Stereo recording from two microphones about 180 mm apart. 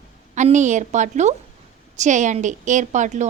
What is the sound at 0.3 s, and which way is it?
A woman's voice, 40° right (ahead or behind).